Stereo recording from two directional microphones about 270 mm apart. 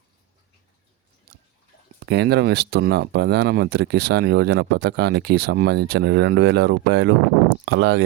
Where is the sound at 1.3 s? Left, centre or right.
Right.